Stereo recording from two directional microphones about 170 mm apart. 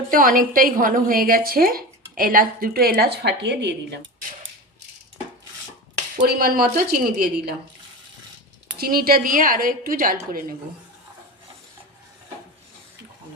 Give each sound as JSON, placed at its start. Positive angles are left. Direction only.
{"t": 0.1, "sound": "a woman's voice", "side_deg": -55}
{"t": 6.1, "sound": "a woman's voice", "side_deg": -60}
{"t": 8.8, "sound": "a woman's voice", "side_deg": -60}